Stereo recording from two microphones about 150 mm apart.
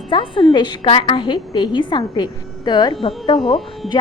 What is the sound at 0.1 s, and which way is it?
A woman's voice, 35° left (ahead or behind).